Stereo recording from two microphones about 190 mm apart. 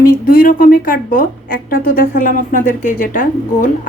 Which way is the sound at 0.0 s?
50° left (ahead or behind).